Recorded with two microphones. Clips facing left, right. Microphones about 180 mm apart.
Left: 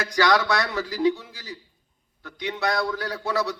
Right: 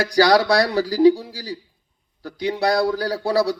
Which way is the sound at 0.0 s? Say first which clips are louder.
Right 6 dB; 35° right (ahead or behind).